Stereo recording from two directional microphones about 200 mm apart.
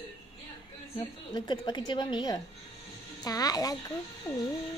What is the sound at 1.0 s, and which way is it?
A woman's voice, 20° left (ahead or behind).